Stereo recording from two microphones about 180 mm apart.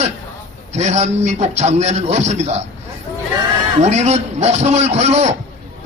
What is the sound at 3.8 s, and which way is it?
A man's voice, 40° right (ahead or behind).